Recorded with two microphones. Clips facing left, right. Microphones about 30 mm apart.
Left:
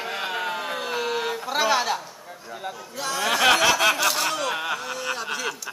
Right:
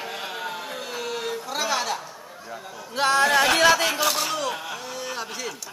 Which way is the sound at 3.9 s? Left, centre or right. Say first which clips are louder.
Left 1 dB; centre.